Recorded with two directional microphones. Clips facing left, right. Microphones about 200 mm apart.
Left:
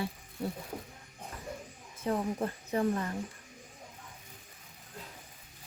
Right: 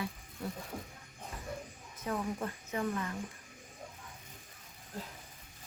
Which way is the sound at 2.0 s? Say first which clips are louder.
Left 4 dB; 30° left (ahead or behind).